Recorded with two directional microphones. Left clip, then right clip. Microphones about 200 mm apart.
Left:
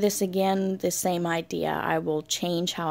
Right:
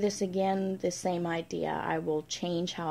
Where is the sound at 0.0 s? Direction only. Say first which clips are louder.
Left 5 dB; 45° left (ahead or behind).